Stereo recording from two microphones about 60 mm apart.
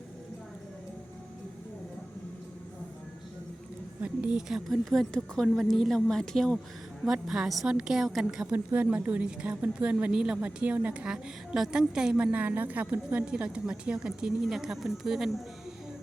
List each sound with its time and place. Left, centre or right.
4.0 s a woman's voice: right
4.4 s speech: centre
5.1 s a woman's voice: centre
7.0 s a woman's voice: centre
8.5 s a woman's voice: right; by 12.1 s centre
12.1 s a woman's voice: right; by 15.4 s centre